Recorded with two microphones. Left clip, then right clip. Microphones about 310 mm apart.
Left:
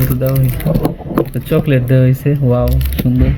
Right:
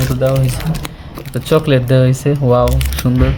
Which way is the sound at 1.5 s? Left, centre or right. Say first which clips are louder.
Right 6 dB; centre.